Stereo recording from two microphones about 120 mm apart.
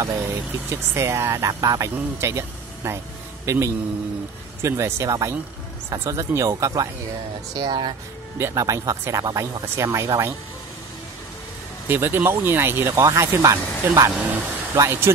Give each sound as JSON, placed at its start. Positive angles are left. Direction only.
{"t": 0.7, "sound": "speech", "side_deg": -25}
{"t": 8.4, "sound": "speech", "side_deg": -25}
{"t": 11.9, "sound": "speech", "side_deg": -15}
{"t": 14.1, "sound": "speech", "side_deg": -15}